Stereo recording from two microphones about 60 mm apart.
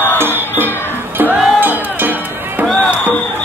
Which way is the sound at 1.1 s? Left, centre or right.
Right.